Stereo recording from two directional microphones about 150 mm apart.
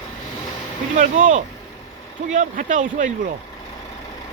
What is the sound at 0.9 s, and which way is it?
Speech, 60° right (ahead or behind).